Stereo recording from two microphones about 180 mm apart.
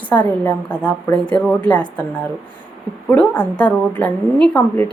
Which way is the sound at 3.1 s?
10° left (ahead or behind).